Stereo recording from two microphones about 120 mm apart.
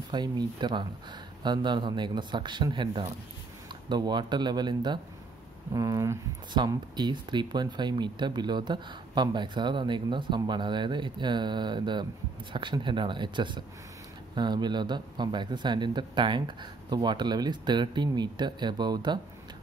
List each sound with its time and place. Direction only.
0.1 s speech: 35° right (ahead or behind)